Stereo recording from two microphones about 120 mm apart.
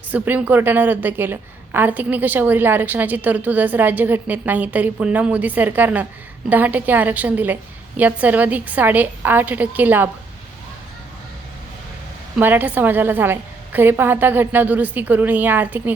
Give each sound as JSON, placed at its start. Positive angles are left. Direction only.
{"t": 0.1, "sound": "a woman's voice", "side_deg": -15}
{"t": 12.4, "sound": "a woman's voice", "side_deg": -15}